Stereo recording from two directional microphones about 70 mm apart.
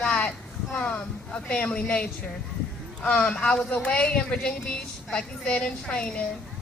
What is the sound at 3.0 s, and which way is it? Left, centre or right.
Speech, centre.